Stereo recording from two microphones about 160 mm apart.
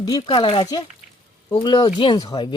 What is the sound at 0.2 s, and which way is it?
Speech, 30° left (ahead or behind).